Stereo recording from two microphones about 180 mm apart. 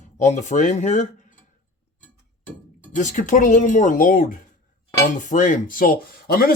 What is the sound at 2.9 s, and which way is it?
Speech, 45° left (ahead or behind).